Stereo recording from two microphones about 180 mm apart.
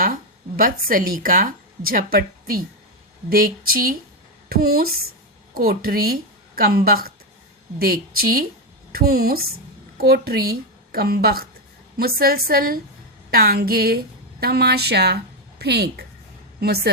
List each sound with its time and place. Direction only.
0.0 s a woman's voice: 50° right (ahead or behind)